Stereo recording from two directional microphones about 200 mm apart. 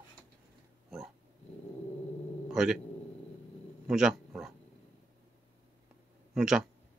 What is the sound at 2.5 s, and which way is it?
Speech, 5° right (ahead or behind).